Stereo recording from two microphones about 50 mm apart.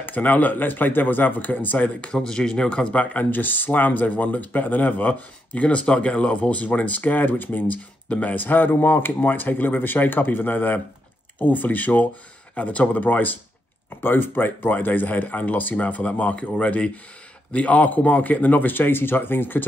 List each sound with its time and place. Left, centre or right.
0.0 s speech: left
2.0 s speech: centre; by 19.6 s left